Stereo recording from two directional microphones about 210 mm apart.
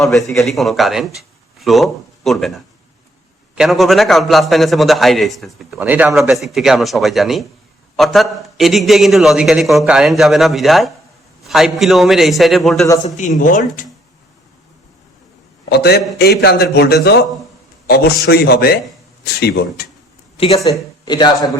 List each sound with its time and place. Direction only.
0.2 s a man's voice: centre (ahead or behind)
13.1 s speech: 35° left (ahead or behind)
15.8 s a man's voice: 50° left (ahead or behind)
20.3 s a sound: 30° left (ahead or behind)
21.0 s speech: 20° left (ahead or behind)